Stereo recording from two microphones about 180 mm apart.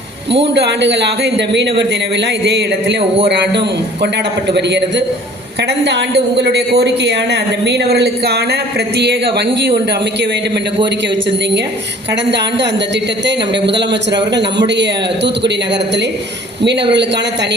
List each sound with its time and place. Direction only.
0.8 s a woman's voice: 75° right (ahead or behind)
13.7 s a woman's voice: 75° right (ahead or behind)